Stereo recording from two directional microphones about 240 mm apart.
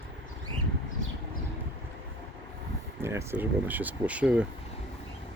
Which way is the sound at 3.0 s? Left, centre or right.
Centre.